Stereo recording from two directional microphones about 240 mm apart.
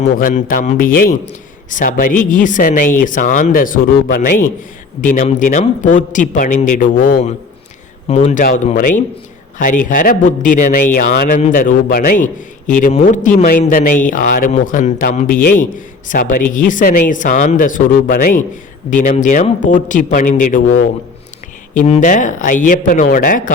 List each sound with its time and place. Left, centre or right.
0.0 s a man's voice: left
21.8 s a man's voice: left